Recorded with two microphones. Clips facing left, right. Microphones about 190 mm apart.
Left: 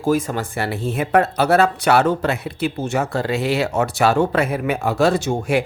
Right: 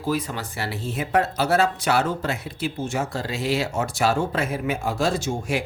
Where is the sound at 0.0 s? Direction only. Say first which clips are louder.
Left 7 dB; 45° left (ahead or behind).